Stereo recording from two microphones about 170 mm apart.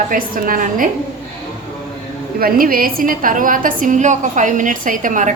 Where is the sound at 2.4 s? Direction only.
60° right (ahead or behind).